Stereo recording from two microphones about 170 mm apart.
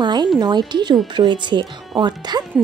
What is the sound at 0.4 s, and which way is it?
A woman's voice, 25° right (ahead or behind).